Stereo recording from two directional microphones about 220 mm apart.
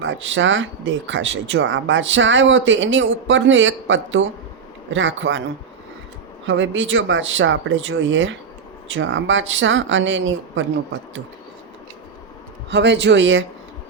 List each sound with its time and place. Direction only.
0.0 s speech: 60° right (ahead or behind)
6.5 s speech: 60° right (ahead or behind)
12.7 s a man's voice: 55° right (ahead or behind)